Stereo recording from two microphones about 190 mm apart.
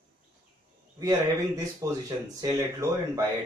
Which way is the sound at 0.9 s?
20° right (ahead or behind).